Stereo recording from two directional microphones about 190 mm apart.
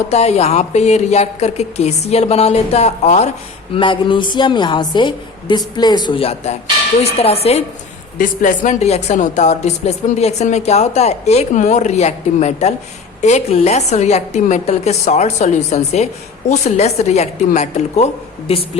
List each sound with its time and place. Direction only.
0.1 s a woman's voice: 35° left (ahead or behind)
3.8 s a woman's voice: 25° left (ahead or behind)